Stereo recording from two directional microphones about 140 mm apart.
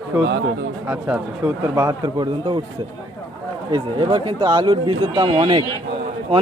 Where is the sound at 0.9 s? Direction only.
10° right (ahead or behind).